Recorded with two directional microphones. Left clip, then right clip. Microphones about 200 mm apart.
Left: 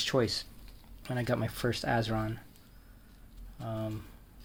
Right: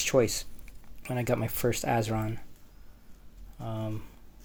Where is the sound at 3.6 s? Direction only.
35° right (ahead or behind).